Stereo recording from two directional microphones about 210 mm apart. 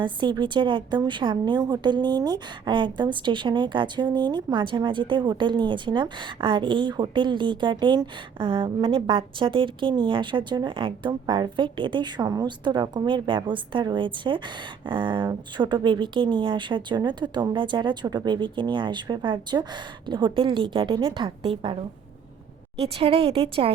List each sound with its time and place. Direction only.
0.0 s a woman's voice: 20° right (ahead or behind)
22.8 s a woman's voice: 25° right (ahead or behind)